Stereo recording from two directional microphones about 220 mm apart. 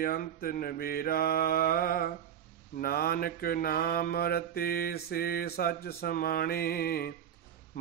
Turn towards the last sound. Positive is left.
turn(degrees=45)  # may be behind; listen again after turning